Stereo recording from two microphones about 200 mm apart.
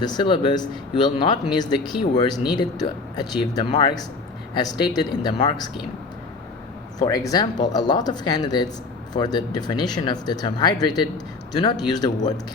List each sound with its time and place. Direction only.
0.0 s speech: 20° left (ahead or behind)
7.0 s speech: 20° left (ahead or behind)